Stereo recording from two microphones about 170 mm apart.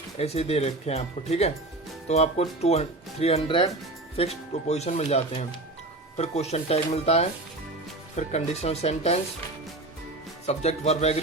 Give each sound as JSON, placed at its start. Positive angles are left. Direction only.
{"t": 0.2, "sound": "speech", "side_deg": 35}
{"t": 10.4, "sound": "speech", "side_deg": 40}